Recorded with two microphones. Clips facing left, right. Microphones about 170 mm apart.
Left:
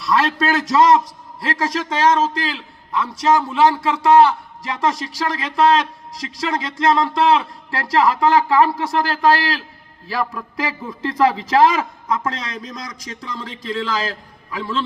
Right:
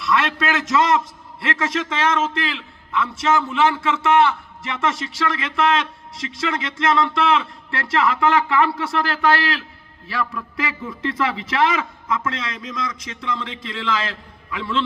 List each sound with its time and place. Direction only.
0.0 s a man's voice: 35° left (ahead or behind)